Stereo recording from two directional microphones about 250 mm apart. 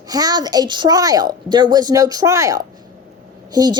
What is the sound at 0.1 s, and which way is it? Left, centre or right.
A woman's voice, centre.